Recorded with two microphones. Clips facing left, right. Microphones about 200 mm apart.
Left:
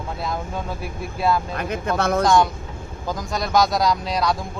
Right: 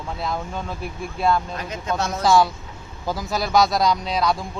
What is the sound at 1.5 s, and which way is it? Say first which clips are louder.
Speech: left 3 dB; 60° left (ahead or behind).